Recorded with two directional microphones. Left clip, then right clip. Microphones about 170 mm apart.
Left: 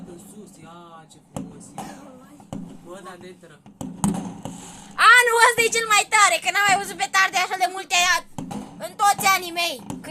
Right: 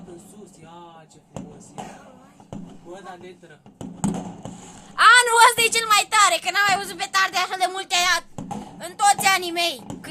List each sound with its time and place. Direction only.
4.9 s a woman's voice: centre (ahead or behind)